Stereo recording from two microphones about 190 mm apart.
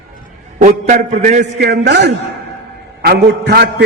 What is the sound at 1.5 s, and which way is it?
A man's voice, 60° right (ahead or behind).